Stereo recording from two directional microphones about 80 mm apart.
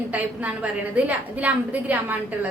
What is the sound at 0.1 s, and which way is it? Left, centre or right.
A woman's voice, centre.